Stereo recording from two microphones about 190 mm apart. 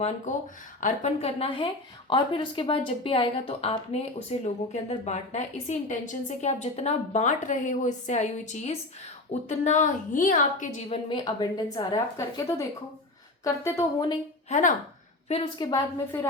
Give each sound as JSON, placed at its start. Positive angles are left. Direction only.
{"t": 0.3, "sound": "speech", "side_deg": 40}
{"t": 15.3, "sound": "speech", "side_deg": 30}
{"t": 16.1, "sound": "speech", "side_deg": 10}